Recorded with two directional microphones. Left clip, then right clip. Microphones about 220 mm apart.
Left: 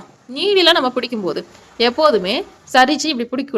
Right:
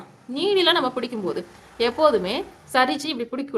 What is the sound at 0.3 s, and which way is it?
Speech, 30° left (ahead or behind).